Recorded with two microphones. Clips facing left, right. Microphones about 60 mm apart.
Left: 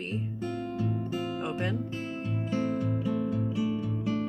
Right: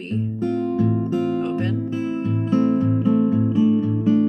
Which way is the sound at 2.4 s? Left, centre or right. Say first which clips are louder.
Right 11 dB; right.